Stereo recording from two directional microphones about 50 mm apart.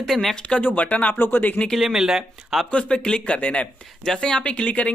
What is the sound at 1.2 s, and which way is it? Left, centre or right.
Speech, left.